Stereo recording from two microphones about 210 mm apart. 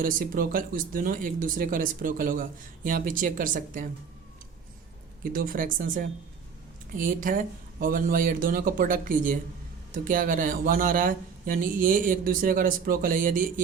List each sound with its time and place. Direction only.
0.0 s speech: 45° right (ahead or behind)
5.2 s speech: 45° right (ahead or behind)